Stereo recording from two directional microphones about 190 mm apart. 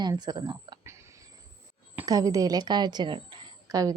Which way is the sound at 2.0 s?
20° right (ahead or behind).